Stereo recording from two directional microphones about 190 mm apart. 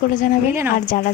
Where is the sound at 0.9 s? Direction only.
50° left (ahead or behind).